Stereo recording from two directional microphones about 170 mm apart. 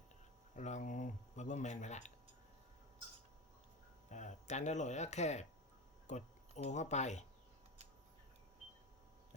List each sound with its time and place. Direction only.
0.5 s speech: 45° left (ahead or behind)
4.1 s speech: 45° left (ahead or behind)